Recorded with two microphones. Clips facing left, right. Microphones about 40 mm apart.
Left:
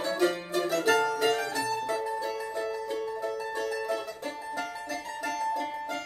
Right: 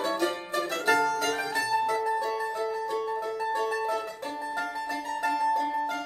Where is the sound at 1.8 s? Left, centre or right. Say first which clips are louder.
Right 4 dB; right.